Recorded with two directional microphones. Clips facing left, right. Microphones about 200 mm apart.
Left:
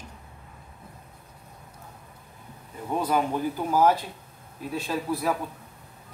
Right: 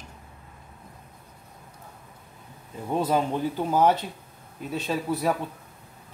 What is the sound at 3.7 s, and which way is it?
Speech, 25° right (ahead or behind).